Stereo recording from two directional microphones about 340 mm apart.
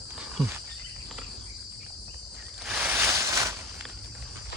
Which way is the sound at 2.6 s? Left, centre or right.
Centre.